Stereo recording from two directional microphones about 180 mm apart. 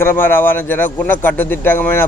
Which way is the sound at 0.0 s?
10° left (ahead or behind).